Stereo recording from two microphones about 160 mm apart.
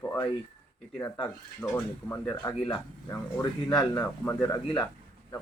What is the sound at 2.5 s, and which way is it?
Speech, 5° left (ahead or behind).